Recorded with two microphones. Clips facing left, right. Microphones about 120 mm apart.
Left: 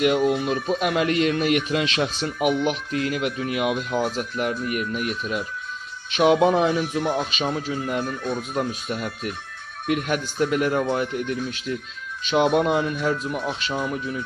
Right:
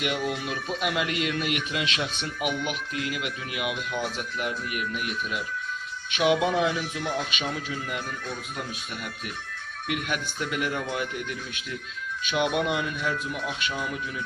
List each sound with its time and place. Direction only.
0.2 s speech: 30° left (ahead or behind)
6.7 s speech: 25° left (ahead or behind)
7.3 s speech: 35° left (ahead or behind)